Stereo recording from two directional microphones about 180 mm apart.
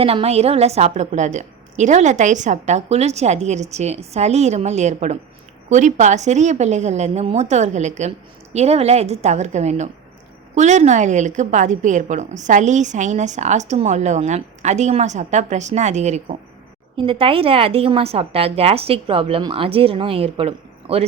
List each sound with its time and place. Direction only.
0.0 s a woman's voice: 30° right (ahead or behind)
17.0 s a woman's voice: 30° right (ahead or behind)